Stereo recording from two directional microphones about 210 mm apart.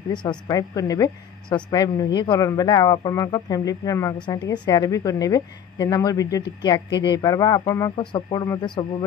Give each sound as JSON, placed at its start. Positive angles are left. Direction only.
{"t": 0.1, "sound": "a woman's voice", "side_deg": 20}